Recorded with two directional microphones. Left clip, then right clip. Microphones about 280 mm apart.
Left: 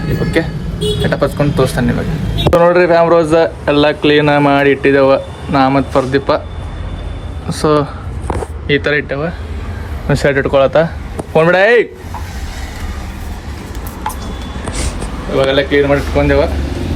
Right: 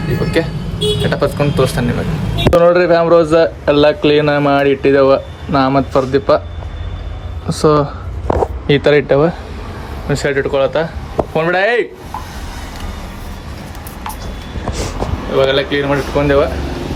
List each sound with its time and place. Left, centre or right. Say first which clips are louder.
0.0 s speech: even; centre
7.4 s speech: right 1 dB; centre
10.1 s speech: left 3 dB; centre
15.4 s speech: left 2 dB; centre